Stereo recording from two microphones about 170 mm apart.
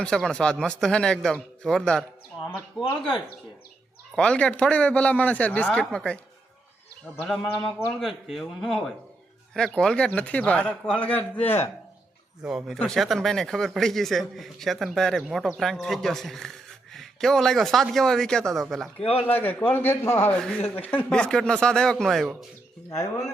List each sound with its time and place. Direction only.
0.0 s a man's voice: 5° left (ahead or behind)
4.2 s a man's voice: 5° left (ahead or behind)
7.9 s a man's voice: centre (ahead or behind)
12.4 s a man's voice: 5° right (ahead or behind)
18.9 s a man's voice: 35° left (ahead or behind)
19.3 s a man's voice: 10° left (ahead or behind)